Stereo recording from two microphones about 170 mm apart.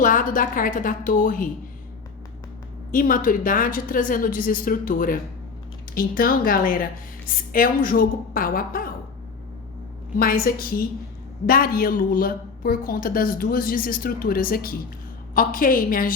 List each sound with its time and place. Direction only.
0.0 s a woman's voice: 50° left (ahead or behind)
2.9 s a woman's voice: 55° left (ahead or behind)
10.2 s a woman's voice: 60° left (ahead or behind)